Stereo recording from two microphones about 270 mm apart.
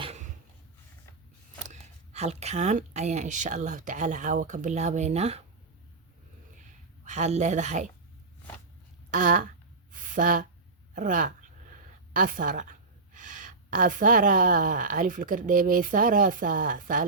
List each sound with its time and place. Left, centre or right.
0.0 s a sound: right
1.6 s a woman's voice: right
7.0 s a woman's voice: right
9.0 s speech: right
9.9 s a sound: right
10.9 s a woman's voice: right